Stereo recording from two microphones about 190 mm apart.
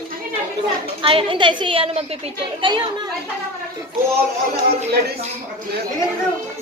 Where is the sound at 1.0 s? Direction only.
30° right (ahead or behind).